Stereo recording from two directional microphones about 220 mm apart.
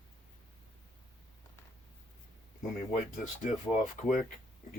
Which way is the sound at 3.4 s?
35° left (ahead or behind).